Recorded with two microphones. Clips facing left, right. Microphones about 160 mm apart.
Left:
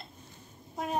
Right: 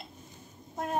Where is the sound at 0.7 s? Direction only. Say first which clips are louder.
Right 1 dB; centre (ahead or behind).